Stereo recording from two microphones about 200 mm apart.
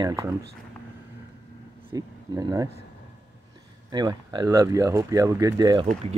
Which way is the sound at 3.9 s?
20° right (ahead or behind).